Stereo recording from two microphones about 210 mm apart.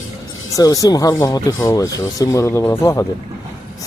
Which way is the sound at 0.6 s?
15° left (ahead or behind).